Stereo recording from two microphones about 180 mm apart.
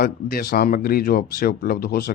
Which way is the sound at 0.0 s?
60° left (ahead or behind).